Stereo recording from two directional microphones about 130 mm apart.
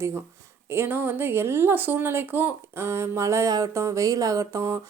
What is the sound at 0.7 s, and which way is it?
Speech, 15° right (ahead or behind).